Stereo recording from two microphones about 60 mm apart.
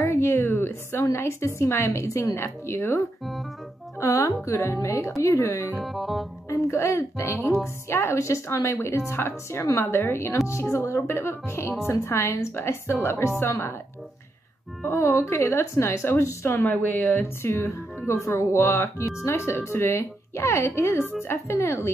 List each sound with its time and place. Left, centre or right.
0.0 s a sound: left
1.1 s a woman's voice: left
4.0 s speech: left
5.8 s music: centre
6.7 s a woman's voice: left
14.9 s a woman's voice: left
16.5 s speech: left
17.2 s a woman's voice: left